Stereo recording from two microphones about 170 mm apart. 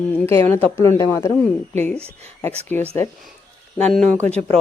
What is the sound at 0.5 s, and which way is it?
Speech, 15° left (ahead or behind).